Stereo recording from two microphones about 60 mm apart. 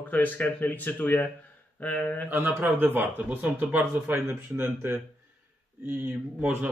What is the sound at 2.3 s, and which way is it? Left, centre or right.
Speech, right.